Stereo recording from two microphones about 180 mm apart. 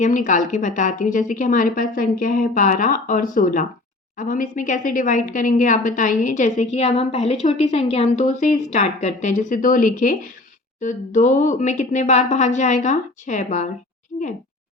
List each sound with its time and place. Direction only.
0.0 s a woman's voice: 45° left (ahead or behind)